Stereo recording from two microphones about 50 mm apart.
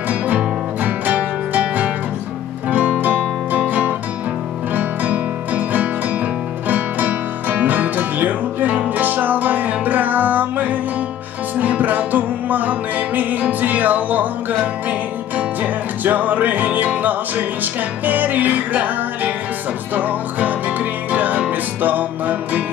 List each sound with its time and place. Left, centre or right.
0.8 s music: right
4.7 s music: right